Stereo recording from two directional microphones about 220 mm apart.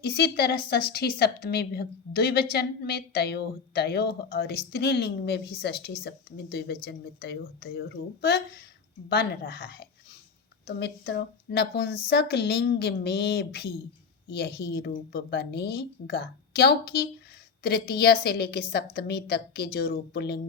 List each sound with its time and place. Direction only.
0.0 s a woman's voice: 50° left (ahead or behind)